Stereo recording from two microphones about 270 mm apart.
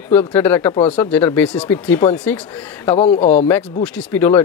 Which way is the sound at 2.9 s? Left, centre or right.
Left.